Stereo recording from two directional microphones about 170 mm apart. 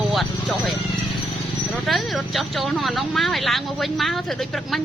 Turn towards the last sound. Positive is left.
turn(degrees=0)  # may be behind; listen again after turning